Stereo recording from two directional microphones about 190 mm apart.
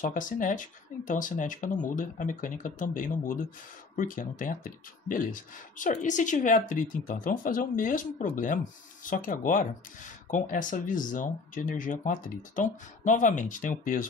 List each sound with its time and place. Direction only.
0.0 s speech: 45° left (ahead or behind)